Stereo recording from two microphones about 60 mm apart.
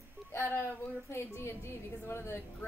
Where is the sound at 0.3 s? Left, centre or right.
Left.